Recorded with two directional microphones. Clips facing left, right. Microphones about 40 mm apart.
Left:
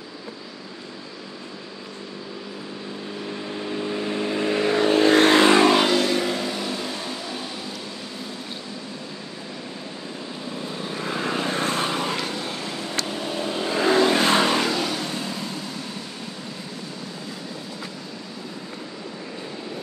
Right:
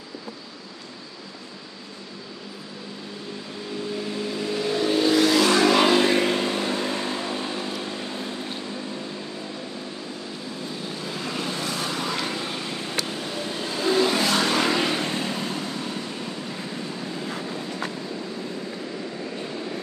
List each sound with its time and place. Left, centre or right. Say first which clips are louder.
4.0 s vehicle: left 4 dB; left
5.4 s vehicle: left 3 dB; left
5.9 s vehicle: right 2 dB; right
11.0 s vehicle: left 6 dB; left
12.3 s vehicle: even; centre
13.1 s vehicle: left 3 dB; left
14.7 s vehicle: right 2 dB; right
17.3 s vehicle: right 4 dB; right